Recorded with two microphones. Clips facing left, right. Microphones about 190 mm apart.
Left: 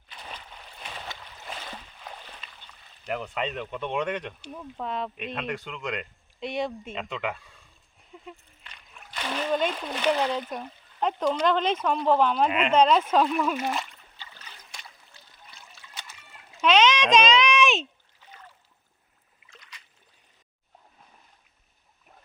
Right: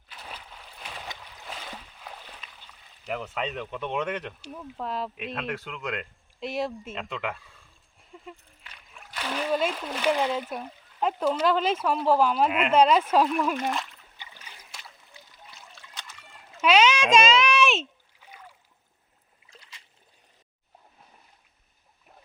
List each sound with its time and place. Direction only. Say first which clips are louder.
0.1 s a sound: left 1 dB; 5° right (ahead or behind)
1.0 s boat: even; 15° right (ahead or behind)
1.4 s speech: left 2 dB; centre (ahead or behind)
14.2 s boat: even; 10° right (ahead or behind)
15.4 s splash: even; centre (ahead or behind)
16.6 s splash: even; 10° right (ahead or behind)
19.5 s boat: even; 30° right (ahead or behind)